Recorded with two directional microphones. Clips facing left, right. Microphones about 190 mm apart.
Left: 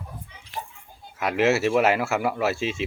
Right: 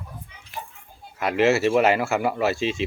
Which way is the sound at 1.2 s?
Centre (ahead or behind).